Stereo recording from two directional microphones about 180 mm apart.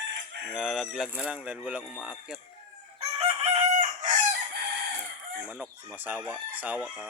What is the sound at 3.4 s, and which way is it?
Chicken, 40° right (ahead or behind).